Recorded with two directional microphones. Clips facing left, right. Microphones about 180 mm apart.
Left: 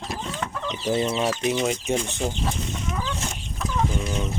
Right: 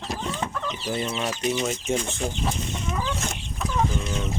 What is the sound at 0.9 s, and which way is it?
Speech, 25° left (ahead or behind).